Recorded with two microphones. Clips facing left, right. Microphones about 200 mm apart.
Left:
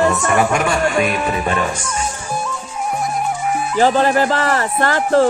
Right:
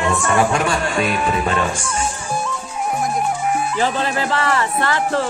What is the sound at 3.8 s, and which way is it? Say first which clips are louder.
Speech: left 10 dB; 45° left (ahead or behind).